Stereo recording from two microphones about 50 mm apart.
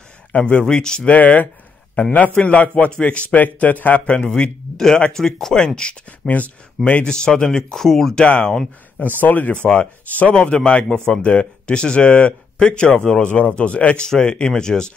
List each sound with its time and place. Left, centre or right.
0.3 s speech: left
1.0 s a man's voice: left
5.1 s speech: centre
6.2 s speech: left
7.1 s speech: centre
9.2 s speech: left
10.3 s speech: centre